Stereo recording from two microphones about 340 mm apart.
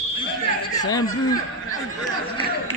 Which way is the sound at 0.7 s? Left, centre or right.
Centre.